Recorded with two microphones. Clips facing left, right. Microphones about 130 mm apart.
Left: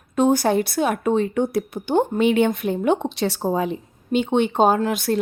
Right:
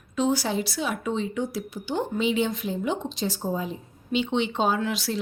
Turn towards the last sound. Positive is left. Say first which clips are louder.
# left 6 dB
turn(degrees=50)  # may be behind; listen again after turning